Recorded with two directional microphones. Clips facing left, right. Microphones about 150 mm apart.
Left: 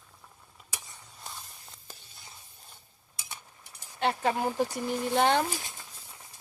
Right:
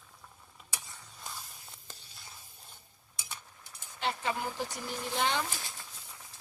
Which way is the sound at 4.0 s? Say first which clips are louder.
Left 6 dB; 55° left (ahead or behind).